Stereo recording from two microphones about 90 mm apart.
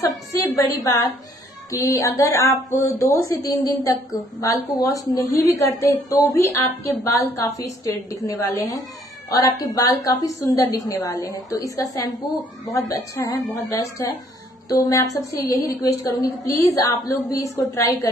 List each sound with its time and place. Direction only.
0.3 s a woman's voice: 40° left (ahead or behind)